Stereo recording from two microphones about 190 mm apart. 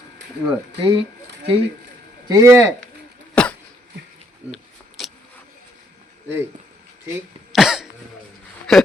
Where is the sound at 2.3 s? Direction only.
15° right (ahead or behind).